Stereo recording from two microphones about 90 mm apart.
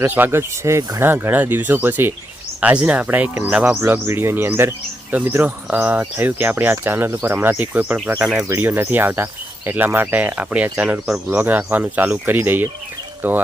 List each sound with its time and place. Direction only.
0.0 s speech: 25° right (ahead or behind)
3.8 s speech: 25° right (ahead or behind); by 8.4 s 10° right (ahead or behind)
8.4 s speech: 25° right (ahead or behind); by 11.2 s 10° right (ahead or behind)
11.3 s speech: 20° right (ahead or behind)